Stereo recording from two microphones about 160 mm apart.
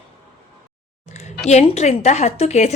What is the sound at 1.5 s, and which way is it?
A woman's voice, 45° left (ahead or behind).